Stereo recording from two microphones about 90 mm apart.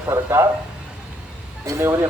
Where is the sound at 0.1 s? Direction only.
30° right (ahead or behind).